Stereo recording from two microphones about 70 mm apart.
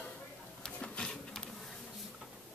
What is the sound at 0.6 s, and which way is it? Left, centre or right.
Printer, centre.